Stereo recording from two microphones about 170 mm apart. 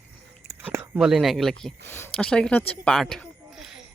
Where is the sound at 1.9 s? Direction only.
15° left (ahead or behind).